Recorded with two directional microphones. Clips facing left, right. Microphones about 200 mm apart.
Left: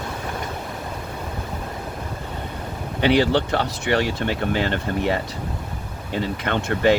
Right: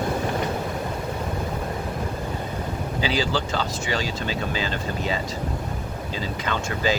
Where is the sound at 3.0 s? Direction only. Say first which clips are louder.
Left 8 dB; 65° left (ahead or behind).